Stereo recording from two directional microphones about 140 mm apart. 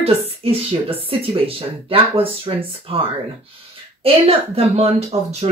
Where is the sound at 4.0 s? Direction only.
45° right (ahead or behind).